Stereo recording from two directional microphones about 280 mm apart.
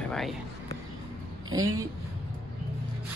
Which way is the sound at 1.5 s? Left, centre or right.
Centre.